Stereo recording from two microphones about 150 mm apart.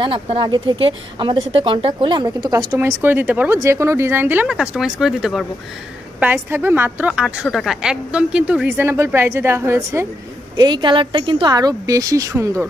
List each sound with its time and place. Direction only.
0.0 s speech: 35° right (ahead or behind); by 5.5 s centre (ahead or behind)
6.1 s a woman's voice: 15° right (ahead or behind)
10.5 s speech: 30° right (ahead or behind)